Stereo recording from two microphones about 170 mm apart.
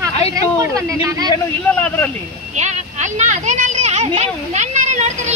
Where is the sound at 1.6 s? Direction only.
10° left (ahead or behind).